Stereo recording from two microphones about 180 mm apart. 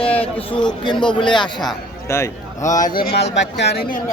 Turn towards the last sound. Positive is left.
turn(degrees=70)  # may be behind; listen again after turning